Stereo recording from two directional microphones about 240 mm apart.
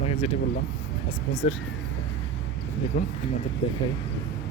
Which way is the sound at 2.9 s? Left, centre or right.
Left.